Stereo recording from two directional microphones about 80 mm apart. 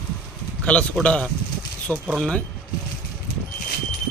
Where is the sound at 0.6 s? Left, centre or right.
Centre.